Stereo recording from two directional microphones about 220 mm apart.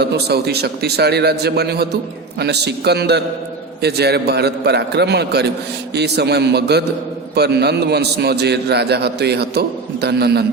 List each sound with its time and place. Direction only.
0.0 s a man's voice: 50° right (ahead or behind)